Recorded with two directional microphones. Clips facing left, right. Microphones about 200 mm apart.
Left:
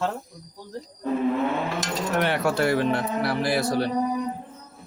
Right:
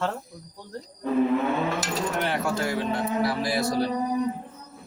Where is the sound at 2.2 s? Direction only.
65° left (ahead or behind).